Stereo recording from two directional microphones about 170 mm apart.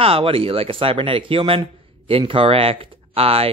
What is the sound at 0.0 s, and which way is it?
Speech, 35° right (ahead or behind).